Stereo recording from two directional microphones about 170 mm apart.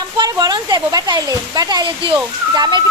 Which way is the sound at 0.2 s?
25° right (ahead or behind).